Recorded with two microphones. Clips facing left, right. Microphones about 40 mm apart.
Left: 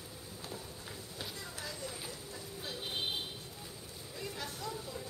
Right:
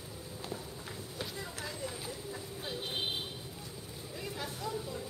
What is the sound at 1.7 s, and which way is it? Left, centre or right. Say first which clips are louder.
Vehicle: right 2 dB; centre.